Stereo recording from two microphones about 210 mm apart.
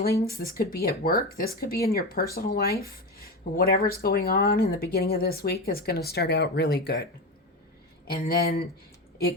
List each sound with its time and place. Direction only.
0.3 s speech: 45° left (ahead or behind)
8.3 s speech: 45° left (ahead or behind)